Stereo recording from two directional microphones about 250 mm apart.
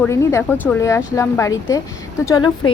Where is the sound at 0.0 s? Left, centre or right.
Centre.